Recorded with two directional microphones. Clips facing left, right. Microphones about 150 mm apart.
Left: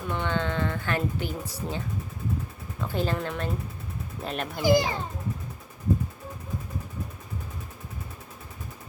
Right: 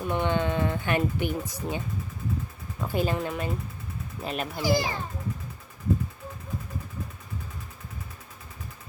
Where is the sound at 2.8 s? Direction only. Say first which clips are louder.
Right 1 dB; 10° right (ahead or behind).